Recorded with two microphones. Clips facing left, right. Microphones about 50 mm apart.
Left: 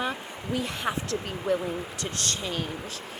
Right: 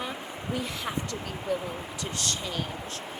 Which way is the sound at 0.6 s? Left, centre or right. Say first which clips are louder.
Left 4 dB; left.